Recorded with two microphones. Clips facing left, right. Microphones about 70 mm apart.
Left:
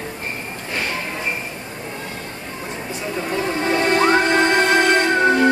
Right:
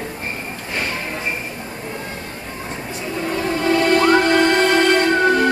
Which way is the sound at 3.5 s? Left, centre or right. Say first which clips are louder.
Right 3 dB; left.